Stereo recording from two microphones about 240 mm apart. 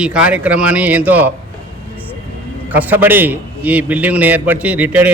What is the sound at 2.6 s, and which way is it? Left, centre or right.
A man's voice, centre.